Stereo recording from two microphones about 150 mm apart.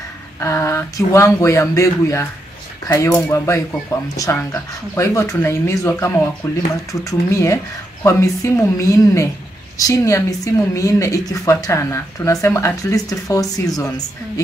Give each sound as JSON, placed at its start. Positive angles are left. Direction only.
{"t": 0.4, "sound": "speech", "side_deg": 20}